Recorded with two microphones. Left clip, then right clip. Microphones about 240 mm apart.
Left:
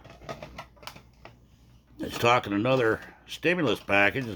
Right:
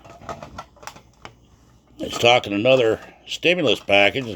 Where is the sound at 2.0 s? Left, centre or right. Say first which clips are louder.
Right 7 dB; left.